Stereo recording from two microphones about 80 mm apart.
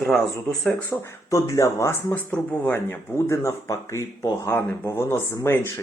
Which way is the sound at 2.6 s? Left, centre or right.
Left.